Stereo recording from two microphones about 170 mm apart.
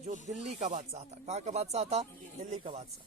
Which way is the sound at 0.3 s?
45° right (ahead or behind).